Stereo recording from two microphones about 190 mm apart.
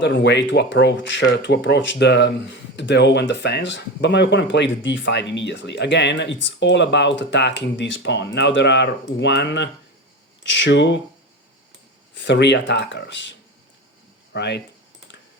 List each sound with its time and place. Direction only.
0.0 s speech: 65° left (ahead or behind)
12.1 s speech: 70° left (ahead or behind)
14.3 s speech: 65° left (ahead or behind)